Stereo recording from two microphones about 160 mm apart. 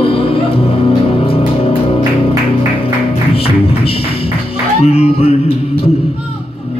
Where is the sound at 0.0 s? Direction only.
35° left (ahead or behind).